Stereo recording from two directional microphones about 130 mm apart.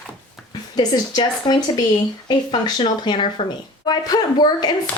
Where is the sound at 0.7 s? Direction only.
30° left (ahead or behind).